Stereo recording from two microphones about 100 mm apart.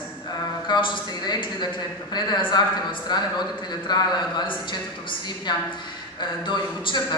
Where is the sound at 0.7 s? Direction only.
50° left (ahead or behind).